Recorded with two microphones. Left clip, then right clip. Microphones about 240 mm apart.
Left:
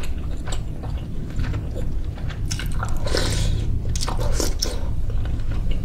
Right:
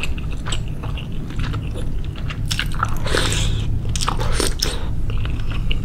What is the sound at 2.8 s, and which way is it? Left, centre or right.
Biting, centre.